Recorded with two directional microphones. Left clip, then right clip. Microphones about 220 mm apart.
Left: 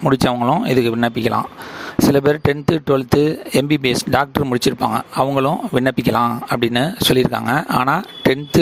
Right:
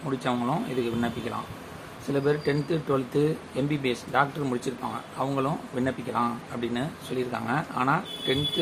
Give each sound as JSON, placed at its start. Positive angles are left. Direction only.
{"t": 0.1, "sound": "speech", "side_deg": 50}